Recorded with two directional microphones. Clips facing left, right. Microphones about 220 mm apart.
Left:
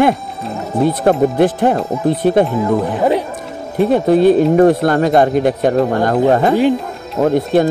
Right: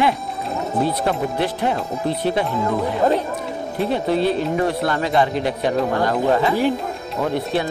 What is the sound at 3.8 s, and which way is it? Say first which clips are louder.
Speech: left 9 dB; 50° left (ahead or behind).